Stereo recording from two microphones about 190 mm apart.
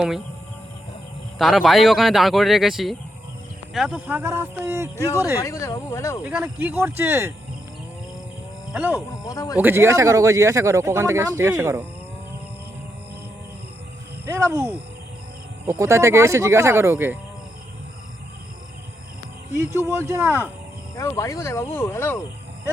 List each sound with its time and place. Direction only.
1.4 s speech: centre (ahead or behind)
5.4 s speech: 15° left (ahead or behind)
6.2 s speech: 10° right (ahead or behind)
8.7 s speech: 5° right (ahead or behind)
9.2 s speech: 15° left (ahead or behind)
9.6 s speech: 10° right (ahead or behind)
14.3 s speech: 15° right (ahead or behind)
19.5 s speech: 15° right (ahead or behind)
20.9 s speech: 15° left (ahead or behind)